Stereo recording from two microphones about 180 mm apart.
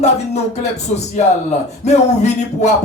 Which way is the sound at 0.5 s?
35° left (ahead or behind).